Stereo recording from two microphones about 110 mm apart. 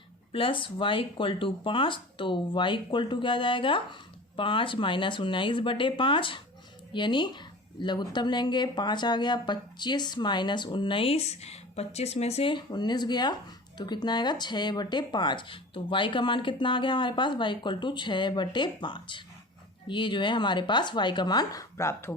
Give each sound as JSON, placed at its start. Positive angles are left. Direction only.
{"t": 0.3, "sound": "a woman's voice", "side_deg": 50}
{"t": 12.5, "sound": "a woman's voice", "side_deg": 45}